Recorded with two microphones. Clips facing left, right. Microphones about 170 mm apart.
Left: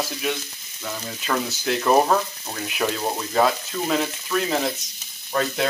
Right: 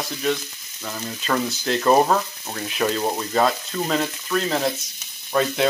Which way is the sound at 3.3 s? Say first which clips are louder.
Left 2 dB; centre (ahead or behind).